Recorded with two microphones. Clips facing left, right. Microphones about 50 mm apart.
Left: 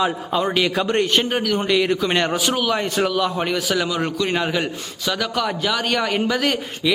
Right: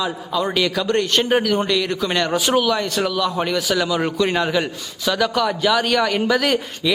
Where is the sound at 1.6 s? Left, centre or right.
Centre.